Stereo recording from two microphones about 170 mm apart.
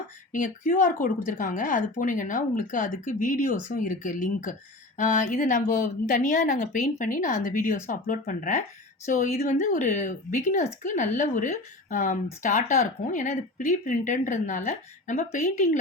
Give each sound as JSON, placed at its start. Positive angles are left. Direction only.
{"t": 0.3, "sound": "a woman's voice", "side_deg": 50}